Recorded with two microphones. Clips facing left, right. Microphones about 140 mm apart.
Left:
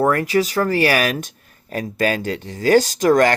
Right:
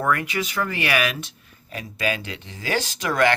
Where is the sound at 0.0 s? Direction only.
35° left (ahead or behind).